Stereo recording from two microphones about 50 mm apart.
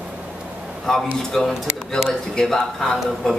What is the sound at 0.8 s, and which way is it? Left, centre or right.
Speech, centre.